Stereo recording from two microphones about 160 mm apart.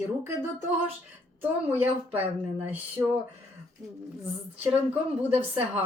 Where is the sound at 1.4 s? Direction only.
10° right (ahead or behind).